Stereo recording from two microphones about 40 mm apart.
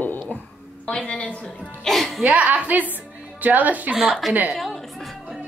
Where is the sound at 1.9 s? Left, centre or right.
Centre.